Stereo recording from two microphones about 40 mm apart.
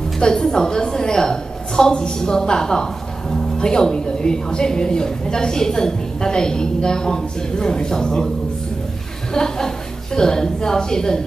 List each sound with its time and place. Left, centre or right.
0.2 s a woman's voice: centre
9.3 s a woman's voice: centre